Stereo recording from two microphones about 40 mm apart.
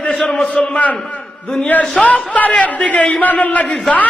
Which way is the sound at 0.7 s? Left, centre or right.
Left.